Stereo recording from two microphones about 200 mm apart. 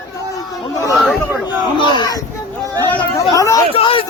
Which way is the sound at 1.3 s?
10° right (ahead or behind).